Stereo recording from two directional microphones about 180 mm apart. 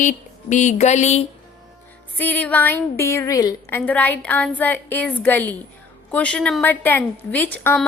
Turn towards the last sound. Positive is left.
turn(degrees=10)  # may be behind; listen again after turning